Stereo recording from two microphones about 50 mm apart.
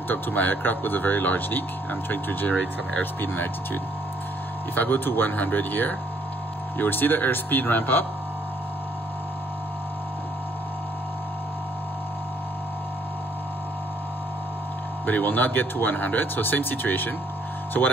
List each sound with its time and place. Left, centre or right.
0.1 s speech: left
15.0 s speech: left